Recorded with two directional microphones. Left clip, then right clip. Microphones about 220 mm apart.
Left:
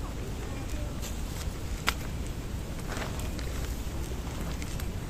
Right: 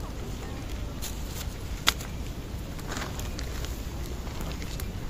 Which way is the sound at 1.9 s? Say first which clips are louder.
Right 5 dB; 55° right (ahead or behind).